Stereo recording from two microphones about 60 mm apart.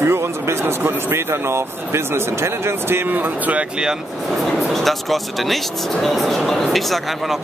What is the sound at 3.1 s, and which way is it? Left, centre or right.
Speech, right.